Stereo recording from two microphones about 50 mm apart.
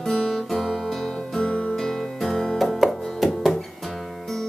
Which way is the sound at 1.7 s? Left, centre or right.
Centre.